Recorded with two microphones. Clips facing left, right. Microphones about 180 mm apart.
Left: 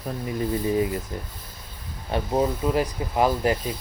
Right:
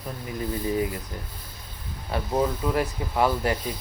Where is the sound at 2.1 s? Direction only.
20° left (ahead or behind).